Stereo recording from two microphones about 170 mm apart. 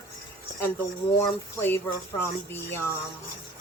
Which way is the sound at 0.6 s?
15° left (ahead or behind).